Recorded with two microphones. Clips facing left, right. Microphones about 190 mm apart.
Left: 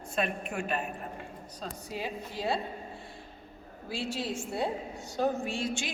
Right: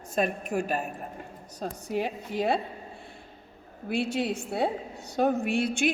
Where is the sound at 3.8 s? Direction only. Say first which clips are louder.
Right 6 dB; 60° right (ahead or behind).